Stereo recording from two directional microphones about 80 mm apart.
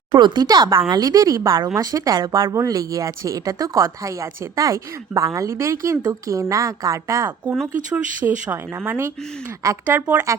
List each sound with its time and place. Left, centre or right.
0.2 s a woman's voice: right
7.9 s speech: right